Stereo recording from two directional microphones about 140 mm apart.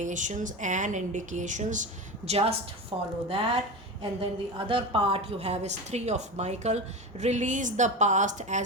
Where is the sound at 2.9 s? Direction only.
35° right (ahead or behind).